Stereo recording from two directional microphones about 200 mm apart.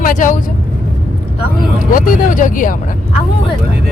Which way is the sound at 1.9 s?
40° left (ahead or behind).